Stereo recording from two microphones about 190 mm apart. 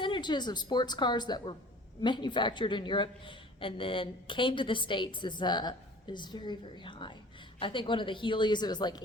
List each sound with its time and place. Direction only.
0.0 s speech: 25° left (ahead or behind)